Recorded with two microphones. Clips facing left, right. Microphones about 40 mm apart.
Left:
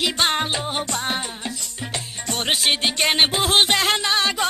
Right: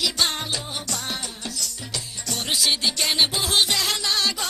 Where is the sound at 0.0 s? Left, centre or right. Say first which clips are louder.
Left 4 dB; left.